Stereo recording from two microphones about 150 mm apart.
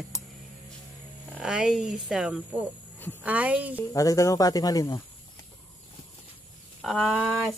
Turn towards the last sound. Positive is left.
turn(degrees=-10)  # may be behind; listen again after turning